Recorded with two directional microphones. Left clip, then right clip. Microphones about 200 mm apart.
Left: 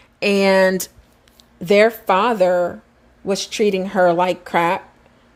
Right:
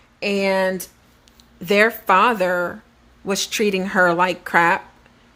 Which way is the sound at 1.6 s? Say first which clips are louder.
Left 3 dB; 10° left (ahead or behind).